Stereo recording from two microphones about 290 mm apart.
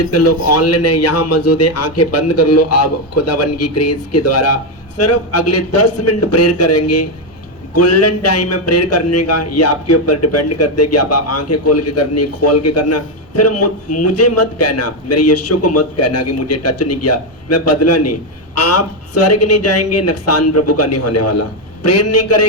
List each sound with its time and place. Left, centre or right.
0.1 s a man's voice: left